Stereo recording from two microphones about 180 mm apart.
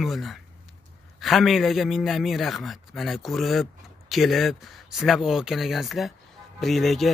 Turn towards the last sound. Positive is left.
turn(degrees=0)  # may be behind; listen again after turning